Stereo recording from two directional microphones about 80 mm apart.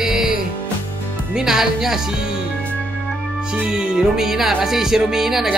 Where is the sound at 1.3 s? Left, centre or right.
Centre.